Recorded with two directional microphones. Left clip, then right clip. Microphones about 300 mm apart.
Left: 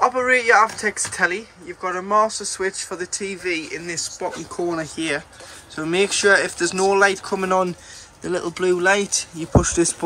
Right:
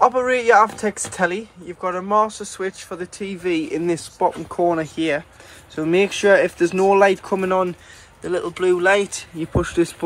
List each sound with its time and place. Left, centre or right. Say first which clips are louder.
0.0 s speech: right 1 dB; centre
3.6 s speech: right 5 dB; centre